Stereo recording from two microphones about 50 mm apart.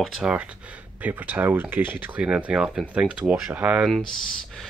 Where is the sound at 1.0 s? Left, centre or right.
Right.